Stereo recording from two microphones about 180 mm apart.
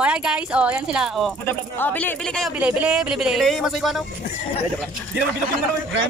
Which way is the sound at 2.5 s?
5° right (ahead or behind).